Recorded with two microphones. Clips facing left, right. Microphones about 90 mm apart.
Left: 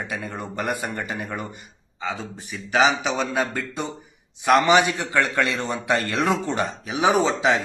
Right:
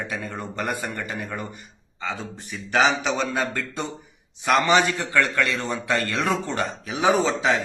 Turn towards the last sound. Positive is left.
turn(degrees=20)  # may be behind; listen again after turning